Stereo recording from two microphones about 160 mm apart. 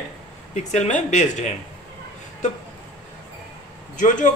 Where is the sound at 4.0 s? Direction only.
50° left (ahead or behind).